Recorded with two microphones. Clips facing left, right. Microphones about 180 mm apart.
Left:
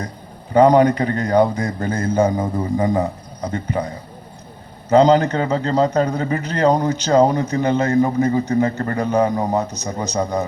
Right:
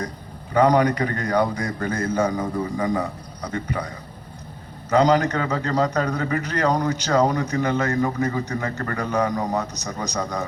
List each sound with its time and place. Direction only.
0.5 s a man's voice: 25° left (ahead or behind)